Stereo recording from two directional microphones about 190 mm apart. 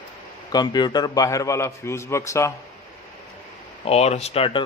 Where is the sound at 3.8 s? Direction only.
35° left (ahead or behind).